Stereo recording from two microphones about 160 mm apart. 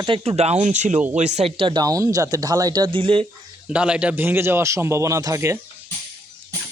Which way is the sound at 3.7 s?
5° right (ahead or behind).